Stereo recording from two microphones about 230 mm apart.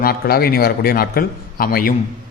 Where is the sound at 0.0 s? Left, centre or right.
Left.